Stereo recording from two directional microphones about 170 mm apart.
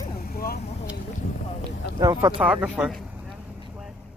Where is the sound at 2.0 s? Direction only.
20° right (ahead or behind).